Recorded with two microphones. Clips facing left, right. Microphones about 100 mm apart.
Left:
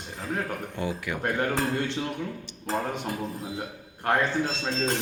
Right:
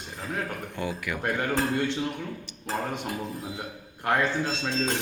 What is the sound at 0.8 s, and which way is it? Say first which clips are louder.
Speech: even; 25° left (ahead or behind).